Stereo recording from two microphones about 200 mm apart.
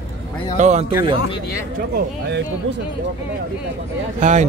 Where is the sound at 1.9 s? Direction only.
60° right (ahead or behind).